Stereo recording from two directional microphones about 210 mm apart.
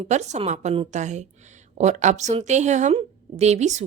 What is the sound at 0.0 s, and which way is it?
A woman's voice, 35° right (ahead or behind).